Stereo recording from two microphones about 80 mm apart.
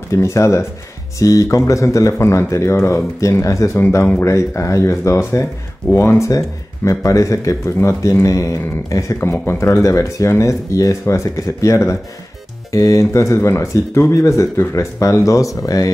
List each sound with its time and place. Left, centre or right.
0.1 s speech: left